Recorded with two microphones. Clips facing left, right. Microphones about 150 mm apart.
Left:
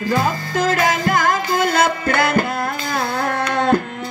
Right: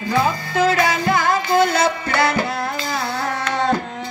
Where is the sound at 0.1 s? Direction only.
45° left (ahead or behind).